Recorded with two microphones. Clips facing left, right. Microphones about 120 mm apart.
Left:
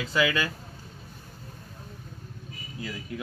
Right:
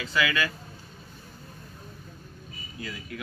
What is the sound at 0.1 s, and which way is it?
Speech, 25° left (ahead or behind).